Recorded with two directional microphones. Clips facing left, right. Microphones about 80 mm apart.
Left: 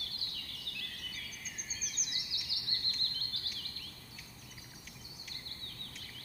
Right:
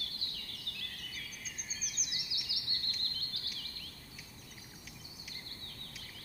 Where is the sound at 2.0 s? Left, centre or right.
Centre.